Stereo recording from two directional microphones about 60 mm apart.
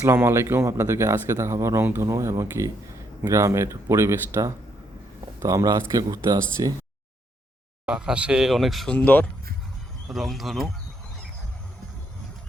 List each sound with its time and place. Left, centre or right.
0.0 s speech: right
5.4 s a man's voice: right
5.9 s speech: right
7.9 s speech: centre
8.5 s speech: centre
10.1 s speech: centre